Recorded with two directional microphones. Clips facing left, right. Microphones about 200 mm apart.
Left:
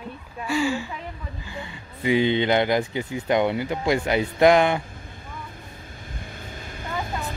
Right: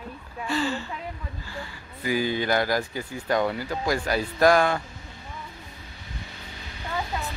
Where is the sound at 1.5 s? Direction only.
20° left (ahead or behind).